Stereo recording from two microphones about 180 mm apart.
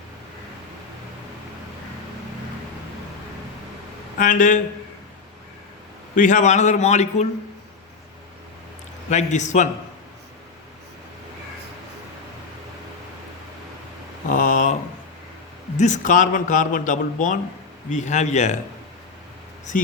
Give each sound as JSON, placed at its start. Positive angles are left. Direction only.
{"t": 4.2, "sound": "a man's voice", "side_deg": 45}
{"t": 6.1, "sound": "a man's voice", "side_deg": 45}
{"t": 9.0, "sound": "a man's voice", "side_deg": 40}
{"t": 14.3, "sound": "mantra", "side_deg": 45}
{"t": 15.8, "sound": "a man's voice", "side_deg": 45}